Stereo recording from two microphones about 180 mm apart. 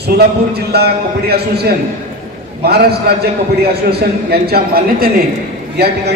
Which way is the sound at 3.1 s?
60° right (ahead or behind).